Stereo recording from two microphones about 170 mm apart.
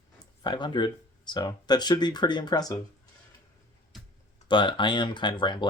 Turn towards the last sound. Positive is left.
turn(degrees=25)  # may be behind; listen again after turning